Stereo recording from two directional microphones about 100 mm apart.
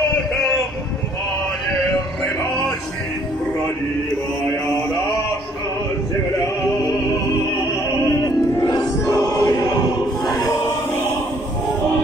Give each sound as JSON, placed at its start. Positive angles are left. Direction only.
{"t": 8.5, "sound": "choir", "side_deg": 35}
{"t": 10.3, "sound": "music", "side_deg": 30}